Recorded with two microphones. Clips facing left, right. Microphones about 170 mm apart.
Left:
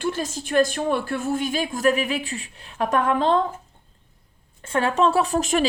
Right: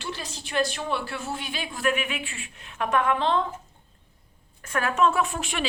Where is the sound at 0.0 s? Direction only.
45° left (ahead or behind).